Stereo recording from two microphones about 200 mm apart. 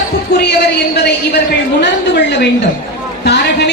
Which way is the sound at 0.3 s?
55° left (ahead or behind).